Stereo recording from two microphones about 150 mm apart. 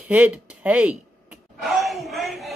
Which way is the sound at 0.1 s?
10° right (ahead or behind).